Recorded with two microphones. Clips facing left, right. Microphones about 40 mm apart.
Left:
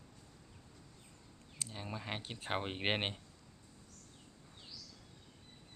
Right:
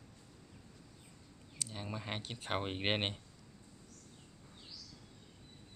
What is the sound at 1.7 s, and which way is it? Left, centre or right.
Speech, centre.